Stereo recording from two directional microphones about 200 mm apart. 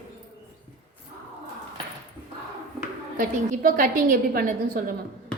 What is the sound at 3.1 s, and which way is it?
A woman's voice, 45° right (ahead or behind).